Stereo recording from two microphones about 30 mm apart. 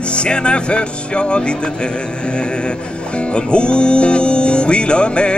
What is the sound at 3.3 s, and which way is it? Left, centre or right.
Music, left.